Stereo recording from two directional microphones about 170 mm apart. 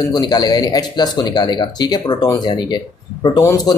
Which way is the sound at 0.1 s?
25° left (ahead or behind).